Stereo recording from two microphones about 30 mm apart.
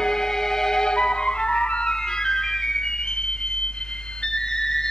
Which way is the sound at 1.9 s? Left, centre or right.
Left.